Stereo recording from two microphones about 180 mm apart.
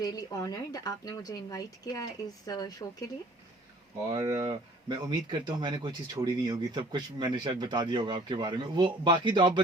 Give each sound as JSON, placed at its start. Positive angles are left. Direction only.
{"t": 0.0, "sound": "speech", "side_deg": 20}
{"t": 4.1, "sound": "speech", "side_deg": -20}